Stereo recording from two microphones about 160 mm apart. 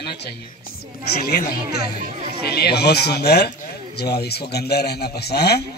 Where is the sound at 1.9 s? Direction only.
50° right (ahead or behind).